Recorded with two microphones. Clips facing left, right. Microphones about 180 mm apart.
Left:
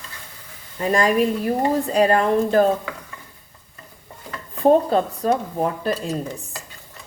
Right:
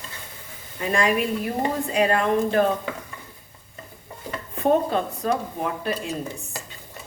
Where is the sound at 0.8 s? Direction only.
35° left (ahead or behind).